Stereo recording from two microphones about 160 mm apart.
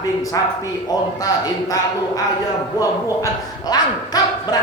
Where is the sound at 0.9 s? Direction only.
25° left (ahead or behind).